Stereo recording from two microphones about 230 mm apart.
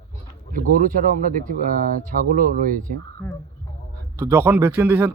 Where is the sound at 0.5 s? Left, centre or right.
Right.